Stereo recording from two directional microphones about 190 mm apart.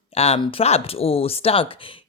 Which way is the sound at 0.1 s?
30° left (ahead or behind).